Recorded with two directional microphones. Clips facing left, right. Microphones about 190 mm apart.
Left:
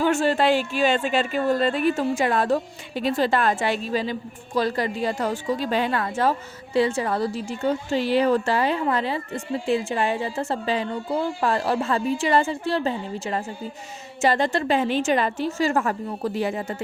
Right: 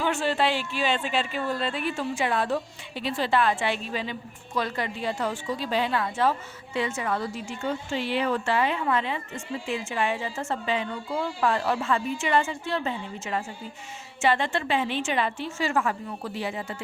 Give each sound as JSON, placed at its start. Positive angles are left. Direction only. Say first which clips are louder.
{"t": 0.0, "sound": "speech", "louder": "left 5 dB", "side_deg": 45}
{"t": 6.7, "sound": "a woman's voice", "louder": "left 6 dB", "side_deg": 35}